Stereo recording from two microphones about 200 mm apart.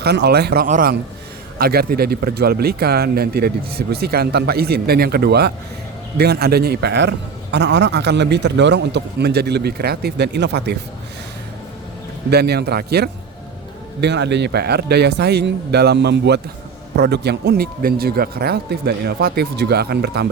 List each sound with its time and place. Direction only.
0.0 s a man's voice: 55° right (ahead or behind)
12.3 s a man's voice: 55° right (ahead or behind)